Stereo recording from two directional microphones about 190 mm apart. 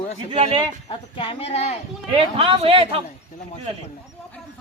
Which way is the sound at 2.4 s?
30° right (ahead or behind).